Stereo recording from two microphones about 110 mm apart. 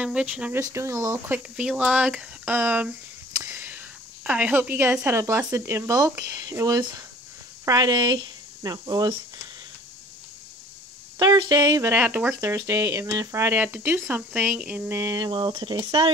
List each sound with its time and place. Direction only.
0.0 s speech: 10° right (ahead or behind)
0.6 s speech: 25° right (ahead or behind)
1.3 s a woman's voice: 10° right (ahead or behind); by 9.1 s 40° right (ahead or behind)
11.1 s speech: 40° right (ahead or behind)
11.8 s speech: 20° right (ahead or behind)
15.3 s speech: 50° right (ahead or behind)